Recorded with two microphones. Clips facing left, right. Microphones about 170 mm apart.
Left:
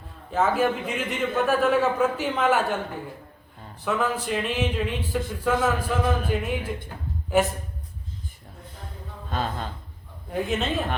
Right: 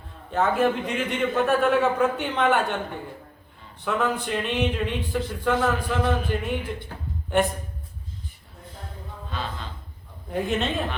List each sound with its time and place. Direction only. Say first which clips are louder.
0.3 s speech: right 1 dB; centre (ahead or behind)
9.3 s speech: left 5 dB; 45° left (ahead or behind)
10.2 s speech: right 1 dB; centre (ahead or behind)